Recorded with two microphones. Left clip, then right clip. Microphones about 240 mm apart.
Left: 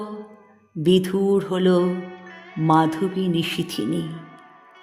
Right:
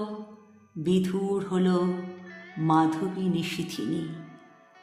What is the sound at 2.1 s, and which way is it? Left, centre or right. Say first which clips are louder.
Music: left 4 dB; centre.